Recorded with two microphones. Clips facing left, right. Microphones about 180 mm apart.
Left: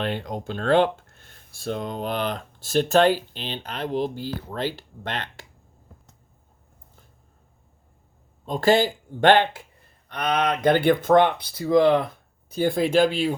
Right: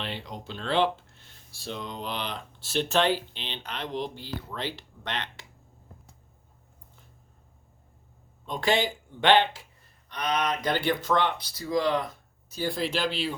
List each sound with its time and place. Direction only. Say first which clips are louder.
0.0 s speech: left 8 dB; 50° left (ahead or behind)
8.4 s speech: left 7 dB; 40° left (ahead or behind)